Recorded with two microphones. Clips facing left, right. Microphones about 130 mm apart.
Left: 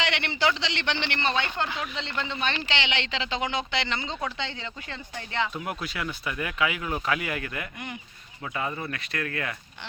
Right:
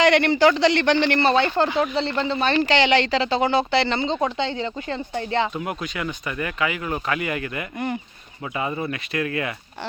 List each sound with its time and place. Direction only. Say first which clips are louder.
0.0 s speech: right 11 dB; 45° right (ahead or behind)
5.5 s speech: right 4 dB; centre (ahead or behind)